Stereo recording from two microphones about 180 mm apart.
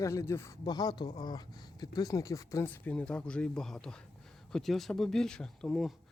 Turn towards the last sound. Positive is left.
turn(degrees=0)  # may be behind; listen again after turning